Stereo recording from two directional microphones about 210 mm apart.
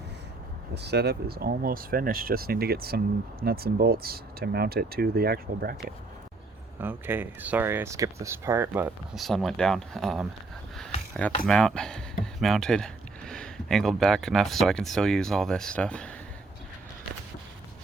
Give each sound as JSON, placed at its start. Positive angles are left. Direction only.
{"t": 0.7, "sound": "speech", "side_deg": -50}
{"t": 6.7, "sound": "speech", "side_deg": -10}
{"t": 9.2, "sound": "speech", "side_deg": 0}
{"t": 11.4, "sound": "speech", "side_deg": 5}